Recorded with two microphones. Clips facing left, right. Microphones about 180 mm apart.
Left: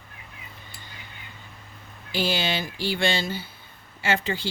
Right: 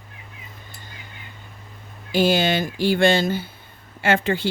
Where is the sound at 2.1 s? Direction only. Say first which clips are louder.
Right 7 dB; 50° right (ahead or behind).